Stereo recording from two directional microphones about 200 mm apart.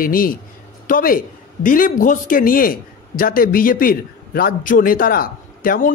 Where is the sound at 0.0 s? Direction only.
45° left (ahead or behind).